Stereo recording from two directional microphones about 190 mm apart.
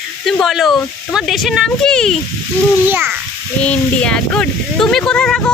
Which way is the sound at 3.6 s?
5° left (ahead or behind).